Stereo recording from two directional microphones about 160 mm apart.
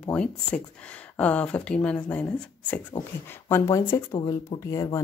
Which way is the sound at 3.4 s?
20° left (ahead or behind).